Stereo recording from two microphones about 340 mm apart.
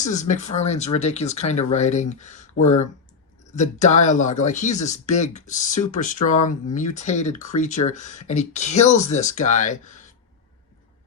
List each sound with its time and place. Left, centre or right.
0.1 s speech: left